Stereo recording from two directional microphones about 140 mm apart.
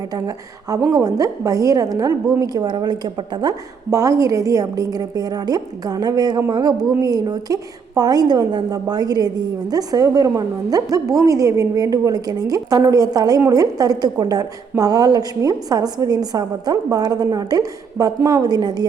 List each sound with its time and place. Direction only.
0.1 s a woman's voice: 25° right (ahead or behind)